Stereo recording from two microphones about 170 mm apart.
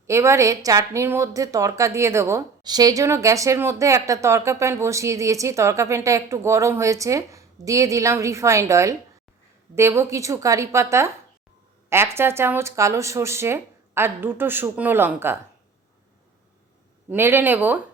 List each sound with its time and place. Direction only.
0.1 s a woman's voice: 15° right (ahead or behind)
17.1 s a woman's voice: 10° right (ahead or behind)